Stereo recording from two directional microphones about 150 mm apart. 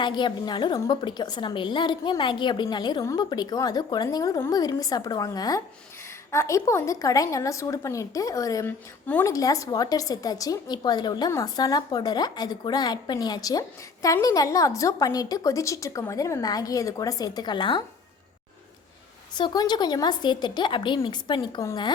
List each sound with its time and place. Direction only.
0.0 s a woman's voice: 30° left (ahead or behind)
19.3 s a woman's voice: 30° left (ahead or behind)